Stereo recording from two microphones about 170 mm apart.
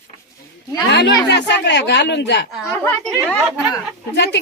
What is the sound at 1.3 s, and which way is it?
Speech, 90° left.